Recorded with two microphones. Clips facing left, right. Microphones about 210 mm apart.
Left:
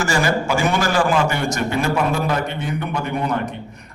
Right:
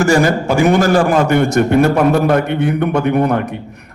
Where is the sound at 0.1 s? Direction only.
50° right (ahead or behind).